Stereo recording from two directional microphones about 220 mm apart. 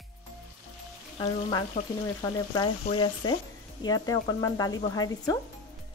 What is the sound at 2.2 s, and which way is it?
Frying, 15° left (ahead or behind).